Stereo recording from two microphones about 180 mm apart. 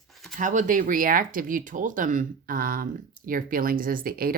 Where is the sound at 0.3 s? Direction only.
45° right (ahead or behind).